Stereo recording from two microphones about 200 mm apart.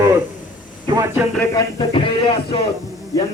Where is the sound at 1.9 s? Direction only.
25° left (ahead or behind).